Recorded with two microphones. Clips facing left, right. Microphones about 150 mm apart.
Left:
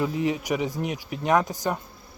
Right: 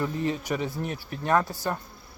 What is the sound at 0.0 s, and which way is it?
Speech, 10° left (ahead or behind).